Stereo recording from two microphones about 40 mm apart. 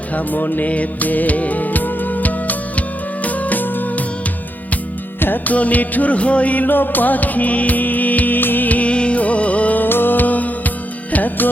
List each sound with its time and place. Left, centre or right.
0.1 s music: left
0.7 s music: left
5.5 s music: left
8.9 s music: left
9.8 s music: left